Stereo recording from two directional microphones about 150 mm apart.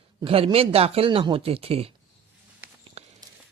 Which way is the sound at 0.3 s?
40° right (ahead or behind).